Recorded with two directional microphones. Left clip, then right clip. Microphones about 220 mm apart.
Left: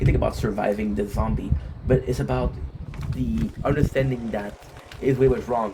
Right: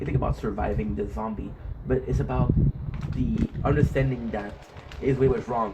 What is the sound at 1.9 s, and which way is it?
Speech, 45° left (ahead or behind).